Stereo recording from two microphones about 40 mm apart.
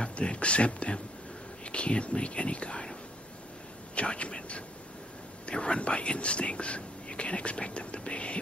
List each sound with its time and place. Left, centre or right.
0.0 s speech: left
3.9 s speech: left
5.5 s speech: left